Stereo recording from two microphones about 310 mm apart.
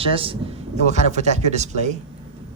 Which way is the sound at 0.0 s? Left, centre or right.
Centre.